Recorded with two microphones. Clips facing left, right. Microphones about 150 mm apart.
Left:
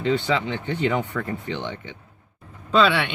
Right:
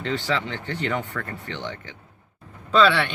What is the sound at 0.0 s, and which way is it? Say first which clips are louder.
Speech: left 4 dB; 10° left (ahead or behind).